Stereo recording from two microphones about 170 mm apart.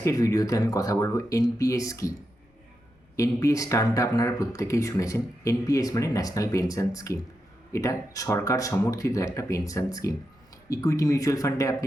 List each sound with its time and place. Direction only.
0.0 s speech: 20° left (ahead or behind)
3.2 s speech: 20° left (ahead or behind)